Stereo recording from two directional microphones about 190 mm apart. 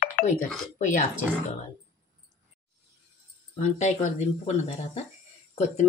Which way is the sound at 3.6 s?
35° left (ahead or behind).